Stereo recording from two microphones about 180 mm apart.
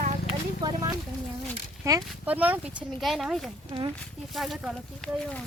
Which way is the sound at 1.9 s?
20° right (ahead or behind).